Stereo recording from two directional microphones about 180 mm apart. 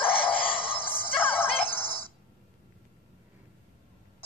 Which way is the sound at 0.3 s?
30° left (ahead or behind).